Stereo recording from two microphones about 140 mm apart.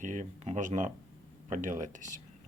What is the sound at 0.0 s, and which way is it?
Speech, 65° right (ahead or behind).